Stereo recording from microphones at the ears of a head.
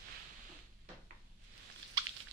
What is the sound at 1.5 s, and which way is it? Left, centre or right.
Biting, right.